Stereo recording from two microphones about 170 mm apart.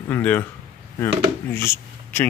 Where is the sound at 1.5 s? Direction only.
15° left (ahead or behind).